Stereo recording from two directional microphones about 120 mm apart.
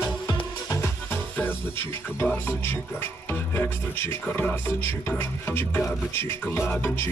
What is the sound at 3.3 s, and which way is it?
Speech, 15° left (ahead or behind).